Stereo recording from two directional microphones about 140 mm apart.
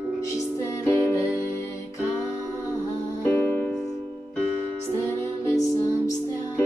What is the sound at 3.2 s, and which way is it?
Music, 10° left (ahead or behind).